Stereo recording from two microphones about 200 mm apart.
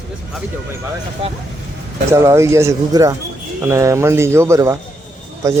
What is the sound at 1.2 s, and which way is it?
Speech, 30° right (ahead or behind).